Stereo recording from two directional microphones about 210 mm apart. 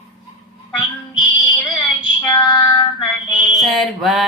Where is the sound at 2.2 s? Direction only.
20° left (ahead or behind).